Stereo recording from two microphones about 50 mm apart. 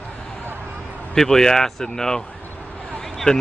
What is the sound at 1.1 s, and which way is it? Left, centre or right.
Speech, centre.